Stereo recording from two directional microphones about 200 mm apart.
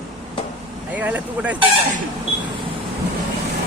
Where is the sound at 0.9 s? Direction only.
10° right (ahead or behind).